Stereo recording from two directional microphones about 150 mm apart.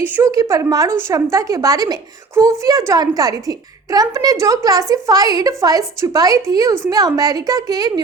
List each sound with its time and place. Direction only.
0.0 s a woman's voice: 20° right (ahead or behind)